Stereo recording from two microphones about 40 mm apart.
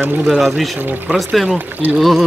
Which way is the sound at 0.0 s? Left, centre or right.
Right.